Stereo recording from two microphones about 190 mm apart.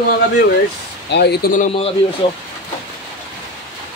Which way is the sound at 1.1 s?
60° left (ahead or behind).